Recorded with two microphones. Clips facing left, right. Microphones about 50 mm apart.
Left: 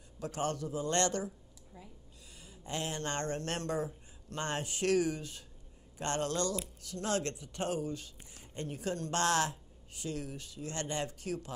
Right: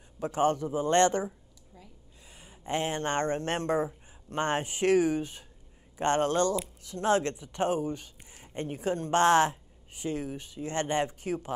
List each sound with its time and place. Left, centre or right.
0.2 s speech: right
2.3 s speech: right